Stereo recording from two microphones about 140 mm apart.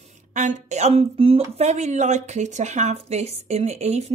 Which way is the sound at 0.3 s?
60° right (ahead or behind).